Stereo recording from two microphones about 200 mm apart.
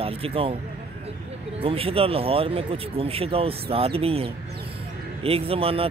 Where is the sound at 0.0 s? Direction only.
30° right (ahead or behind).